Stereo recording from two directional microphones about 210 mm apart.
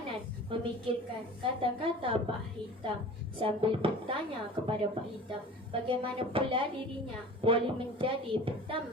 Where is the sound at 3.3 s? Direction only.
25° right (ahead or behind).